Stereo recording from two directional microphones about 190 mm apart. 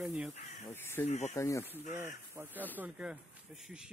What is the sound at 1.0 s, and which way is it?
Speech, 35° left (ahead or behind).